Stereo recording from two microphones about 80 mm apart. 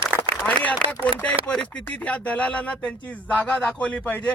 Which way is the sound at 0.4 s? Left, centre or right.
Centre.